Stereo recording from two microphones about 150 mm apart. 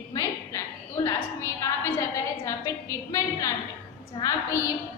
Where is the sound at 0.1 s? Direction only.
20° left (ahead or behind).